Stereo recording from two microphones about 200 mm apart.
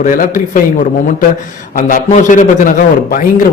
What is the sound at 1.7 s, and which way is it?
A man's voice, 40° left (ahead or behind).